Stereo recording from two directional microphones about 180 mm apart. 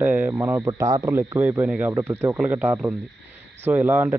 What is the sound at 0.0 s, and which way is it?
Speech, 10° right (ahead or behind).